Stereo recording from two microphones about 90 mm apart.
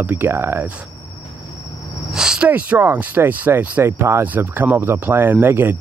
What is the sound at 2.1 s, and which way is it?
Speech, 10° right (ahead or behind).